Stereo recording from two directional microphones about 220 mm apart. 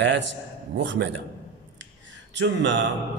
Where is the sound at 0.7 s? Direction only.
55° right (ahead or behind).